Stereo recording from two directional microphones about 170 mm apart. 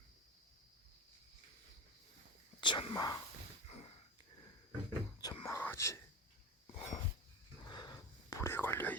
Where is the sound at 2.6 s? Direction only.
25° left (ahead or behind).